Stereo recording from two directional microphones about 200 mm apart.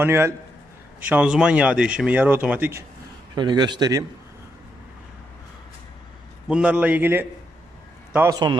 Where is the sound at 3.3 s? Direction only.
20° right (ahead or behind).